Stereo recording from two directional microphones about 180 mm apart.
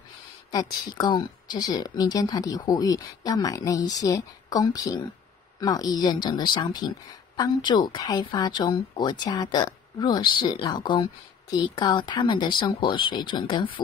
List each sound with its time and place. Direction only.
0.5 s speech: 20° left (ahead or behind)